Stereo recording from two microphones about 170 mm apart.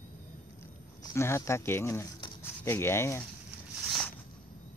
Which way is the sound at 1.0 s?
15° left (ahead or behind).